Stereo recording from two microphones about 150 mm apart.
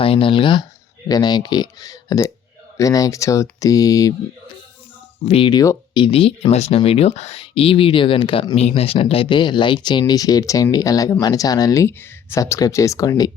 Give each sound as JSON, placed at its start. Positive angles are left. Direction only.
{"t": 0.0, "sound": "speech", "side_deg": 35}
{"t": 5.2, "sound": "speech", "side_deg": 40}
{"t": 5.5, "sound": "speech", "side_deg": 25}